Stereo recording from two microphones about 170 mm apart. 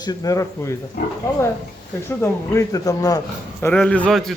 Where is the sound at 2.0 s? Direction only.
15° left (ahead or behind).